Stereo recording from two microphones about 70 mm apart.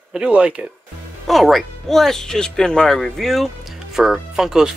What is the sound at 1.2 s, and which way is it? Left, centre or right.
Speech, centre.